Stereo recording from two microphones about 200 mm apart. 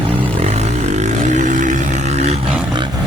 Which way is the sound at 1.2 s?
40° right (ahead or behind).